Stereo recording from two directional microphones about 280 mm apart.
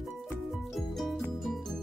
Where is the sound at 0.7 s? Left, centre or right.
Centre.